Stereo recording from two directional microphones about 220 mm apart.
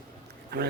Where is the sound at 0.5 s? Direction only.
45° right (ahead or behind).